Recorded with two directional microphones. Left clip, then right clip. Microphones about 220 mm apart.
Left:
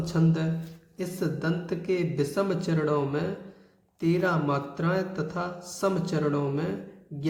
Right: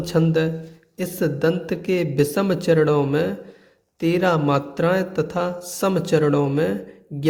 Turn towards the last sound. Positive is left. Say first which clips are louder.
# right 9 dB
turn(degrees=-45)  # may be behind; listen again after turning